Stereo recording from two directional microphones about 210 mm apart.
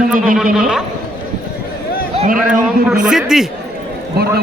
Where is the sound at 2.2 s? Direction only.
40° right (ahead or behind).